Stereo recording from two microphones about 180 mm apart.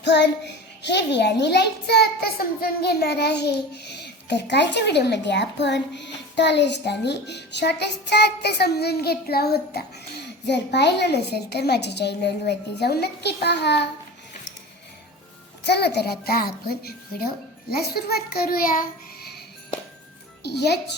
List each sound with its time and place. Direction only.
0.0 s a child's voice: 70° left (ahead or behind)
10.4 s a child's voice: 70° left (ahead or behind)
15.6 s a child's voice: 70° left (ahead or behind); by 18.9 s 50° left (ahead or behind)
20.5 s a child's voice: 65° left (ahead or behind)